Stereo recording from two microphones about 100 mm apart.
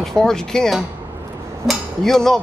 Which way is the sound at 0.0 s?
5° left (ahead or behind).